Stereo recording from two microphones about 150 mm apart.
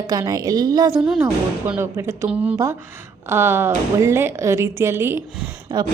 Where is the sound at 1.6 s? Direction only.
15° right (ahead or behind).